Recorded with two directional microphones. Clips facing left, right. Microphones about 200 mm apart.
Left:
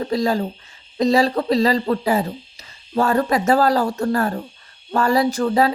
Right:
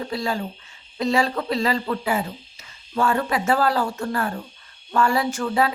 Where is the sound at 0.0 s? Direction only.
40° left (ahead or behind).